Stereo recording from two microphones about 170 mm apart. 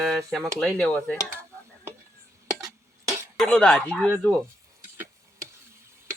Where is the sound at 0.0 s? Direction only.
5° left (ahead or behind).